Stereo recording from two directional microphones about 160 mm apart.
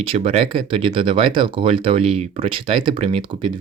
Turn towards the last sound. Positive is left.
turn(degrees=-30)  # may be behind; listen again after turning